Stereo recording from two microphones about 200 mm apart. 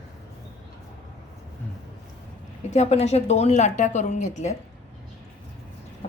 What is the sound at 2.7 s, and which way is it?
A woman's voice, 35° left (ahead or behind).